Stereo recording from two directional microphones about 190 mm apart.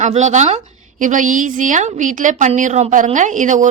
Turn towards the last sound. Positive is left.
turn(degrees=-40)  # may be behind; listen again after turning